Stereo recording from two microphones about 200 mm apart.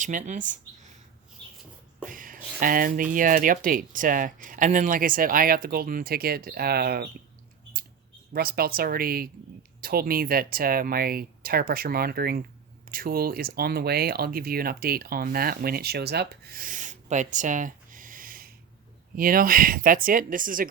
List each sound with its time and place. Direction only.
0.0 s speech: 40° right (ahead or behind)
2.0 s speech: 45° right (ahead or behind)
8.3 s speech: 50° right (ahead or behind)